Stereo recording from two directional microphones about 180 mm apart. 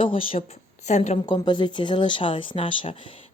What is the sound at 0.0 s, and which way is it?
A woman's voice, 30° left (ahead or behind).